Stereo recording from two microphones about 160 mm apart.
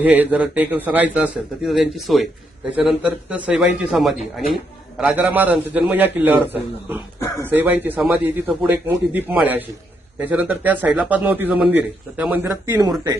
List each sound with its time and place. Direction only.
0.0 s a man's voice: 10° right (ahead or behind)
7.2 s speech: 20° left (ahead or behind)
7.5 s speech: 10° right (ahead or behind)